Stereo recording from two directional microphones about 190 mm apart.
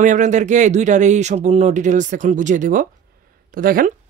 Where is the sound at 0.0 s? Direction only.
40° right (ahead or behind).